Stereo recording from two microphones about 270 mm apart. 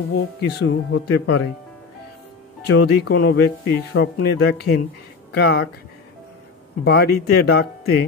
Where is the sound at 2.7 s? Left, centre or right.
Left.